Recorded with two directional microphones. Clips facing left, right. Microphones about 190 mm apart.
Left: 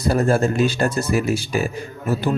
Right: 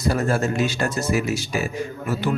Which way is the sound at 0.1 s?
30° left (ahead or behind).